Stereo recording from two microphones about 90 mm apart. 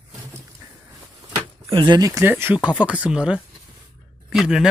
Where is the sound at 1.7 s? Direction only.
60° right (ahead or behind).